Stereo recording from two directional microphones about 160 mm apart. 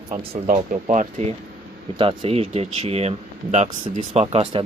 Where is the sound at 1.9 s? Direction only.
35° right (ahead or behind); by 4.2 s 50° right (ahead or behind).